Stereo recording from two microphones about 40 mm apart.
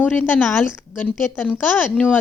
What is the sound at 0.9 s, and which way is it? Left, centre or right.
Speech, left.